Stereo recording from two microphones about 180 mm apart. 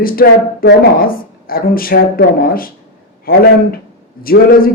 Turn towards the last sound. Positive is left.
turn(degrees=55)  # may be behind; listen again after turning